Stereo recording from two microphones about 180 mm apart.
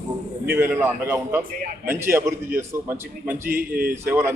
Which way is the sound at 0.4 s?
10° right (ahead or behind).